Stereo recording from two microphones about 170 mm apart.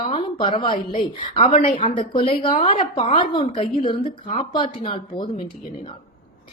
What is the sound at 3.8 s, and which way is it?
A woman's voice, 30° left (ahead or behind).